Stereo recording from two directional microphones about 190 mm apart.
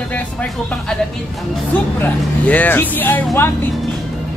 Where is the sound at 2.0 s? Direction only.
10° left (ahead or behind).